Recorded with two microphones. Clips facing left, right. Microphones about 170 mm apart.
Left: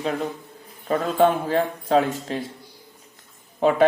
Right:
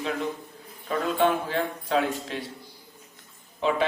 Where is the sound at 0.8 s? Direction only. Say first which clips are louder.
Left 5 dB; 45° left (ahead or behind).